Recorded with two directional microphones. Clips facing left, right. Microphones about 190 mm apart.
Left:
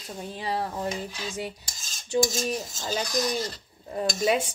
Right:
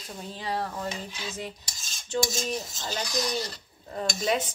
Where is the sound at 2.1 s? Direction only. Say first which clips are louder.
Left 3 dB; 10° left (ahead or behind).